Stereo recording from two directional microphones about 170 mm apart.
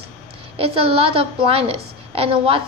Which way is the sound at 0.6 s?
35° right (ahead or behind).